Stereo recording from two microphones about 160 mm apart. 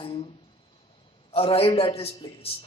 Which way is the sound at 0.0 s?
35° left (ahead or behind).